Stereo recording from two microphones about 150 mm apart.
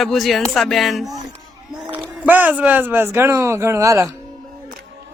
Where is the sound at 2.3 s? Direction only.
10° right (ahead or behind).